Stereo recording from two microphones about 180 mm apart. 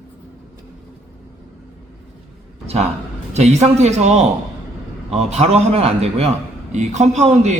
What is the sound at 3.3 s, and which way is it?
A man's voice, 40° right (ahead or behind).